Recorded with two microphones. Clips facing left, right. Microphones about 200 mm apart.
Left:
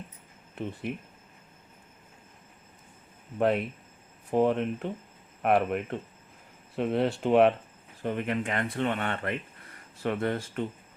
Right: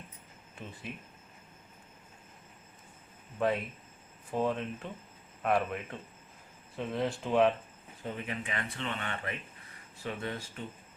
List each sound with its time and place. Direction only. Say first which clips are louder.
0.5 s speech: left 11 dB; 65° left (ahead or behind)
3.3 s speech: left 5 dB; 60° left (ahead or behind)